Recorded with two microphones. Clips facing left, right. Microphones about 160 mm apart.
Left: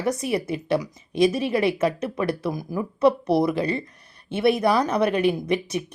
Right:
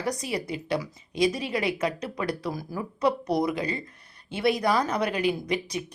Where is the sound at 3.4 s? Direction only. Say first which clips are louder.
Left 5 dB; 30° left (ahead or behind).